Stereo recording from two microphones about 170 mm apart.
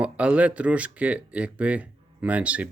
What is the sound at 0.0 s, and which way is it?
Speech, 5° right (ahead or behind).